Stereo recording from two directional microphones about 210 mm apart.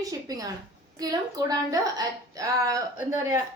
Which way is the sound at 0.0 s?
15° right (ahead or behind).